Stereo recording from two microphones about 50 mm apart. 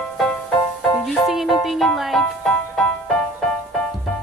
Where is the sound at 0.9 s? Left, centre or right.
Centre.